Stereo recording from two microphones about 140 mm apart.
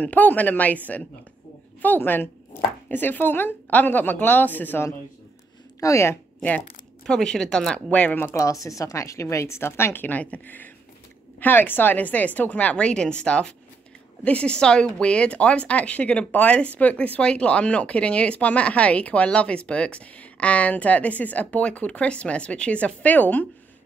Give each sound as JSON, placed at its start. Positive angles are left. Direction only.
{"t": 0.0, "sound": "speech", "side_deg": 10}
{"t": 7.1, "sound": "speech", "side_deg": 5}